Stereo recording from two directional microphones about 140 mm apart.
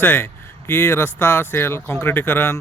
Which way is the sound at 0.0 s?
15° left (ahead or behind).